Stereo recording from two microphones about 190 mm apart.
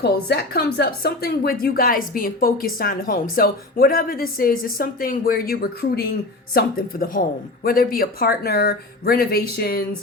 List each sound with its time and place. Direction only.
0.0 s a woman's voice: 60° left (ahead or behind)